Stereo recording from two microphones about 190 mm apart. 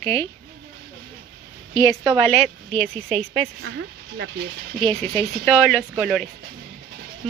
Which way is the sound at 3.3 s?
60° right (ahead or behind).